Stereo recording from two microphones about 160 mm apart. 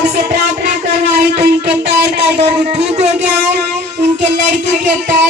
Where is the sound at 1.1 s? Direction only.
90° right.